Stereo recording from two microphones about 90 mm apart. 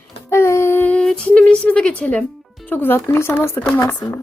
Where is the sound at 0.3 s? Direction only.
30° left (ahead or behind).